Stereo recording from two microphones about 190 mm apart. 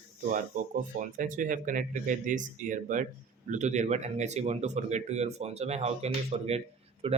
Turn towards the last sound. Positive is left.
turn(degrees=-30)  # may be behind; listen again after turning